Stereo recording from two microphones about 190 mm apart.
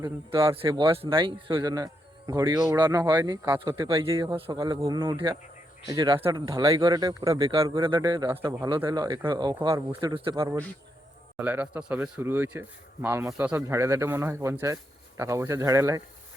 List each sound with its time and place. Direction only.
0.5 s speech: 25° right (ahead or behind)
7.3 s speech: 30° right (ahead or behind)
11.3 s speech: 10° right (ahead or behind)